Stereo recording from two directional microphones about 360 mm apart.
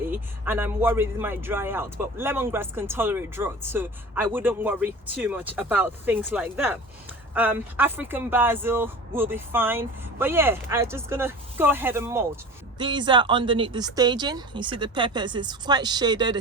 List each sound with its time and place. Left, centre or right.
0.0 s speech: centre